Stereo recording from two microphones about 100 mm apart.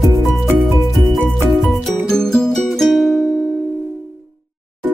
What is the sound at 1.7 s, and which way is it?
Music, 5° left (ahead or behind).